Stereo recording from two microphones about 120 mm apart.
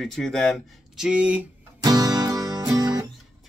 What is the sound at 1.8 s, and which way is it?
Music, 35° right (ahead or behind).